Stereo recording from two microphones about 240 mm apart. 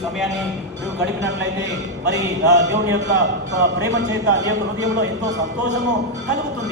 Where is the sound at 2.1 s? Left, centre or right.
Right.